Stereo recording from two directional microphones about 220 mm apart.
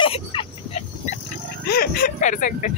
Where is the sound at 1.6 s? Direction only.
45° left (ahead or behind).